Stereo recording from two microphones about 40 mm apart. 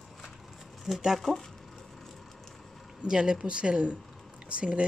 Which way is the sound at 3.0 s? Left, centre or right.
Centre.